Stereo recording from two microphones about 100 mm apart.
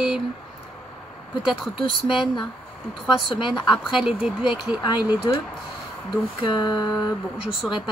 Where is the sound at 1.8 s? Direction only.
60° left (ahead or behind).